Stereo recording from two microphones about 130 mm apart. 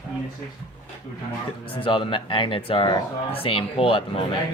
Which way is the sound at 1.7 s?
40° left (ahead or behind).